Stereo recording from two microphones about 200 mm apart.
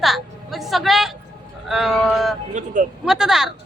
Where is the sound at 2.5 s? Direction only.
40° right (ahead or behind).